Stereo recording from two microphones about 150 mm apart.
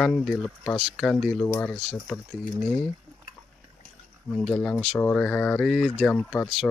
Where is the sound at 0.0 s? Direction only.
5° left (ahead or behind).